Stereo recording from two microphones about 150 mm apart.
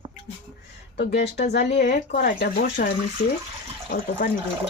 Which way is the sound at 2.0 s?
80° left.